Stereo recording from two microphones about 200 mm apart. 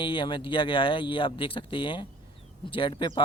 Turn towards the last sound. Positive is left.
turn(degrees=25)  # may be behind; listen again after turning